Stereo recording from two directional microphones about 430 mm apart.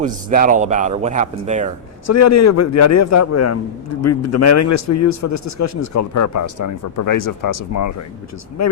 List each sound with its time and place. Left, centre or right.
0.0 s speech: centre
2.0 s a man's voice: left